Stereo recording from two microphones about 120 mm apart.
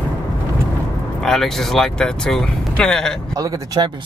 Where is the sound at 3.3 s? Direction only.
30° right (ahead or behind).